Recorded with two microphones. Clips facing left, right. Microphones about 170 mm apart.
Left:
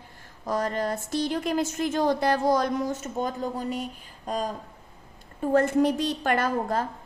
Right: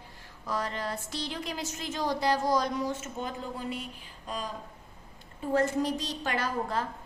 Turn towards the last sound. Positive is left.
turn(degrees=50)  # may be behind; listen again after turning